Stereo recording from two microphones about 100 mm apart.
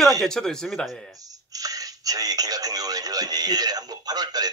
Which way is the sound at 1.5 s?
35° right (ahead or behind).